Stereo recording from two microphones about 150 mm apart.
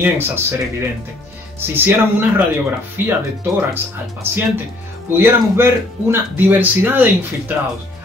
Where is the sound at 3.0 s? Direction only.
15° right (ahead or behind).